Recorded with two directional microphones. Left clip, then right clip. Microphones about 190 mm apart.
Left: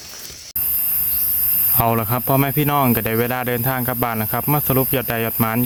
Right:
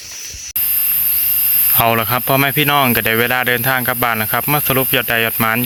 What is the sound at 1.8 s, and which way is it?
Speech, centre (ahead or behind).